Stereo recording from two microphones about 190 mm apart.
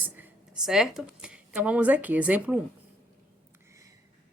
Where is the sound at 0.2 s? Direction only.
5° right (ahead or behind).